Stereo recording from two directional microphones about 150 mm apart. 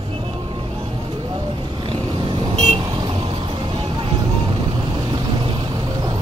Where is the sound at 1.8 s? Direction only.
40° right (ahead or behind).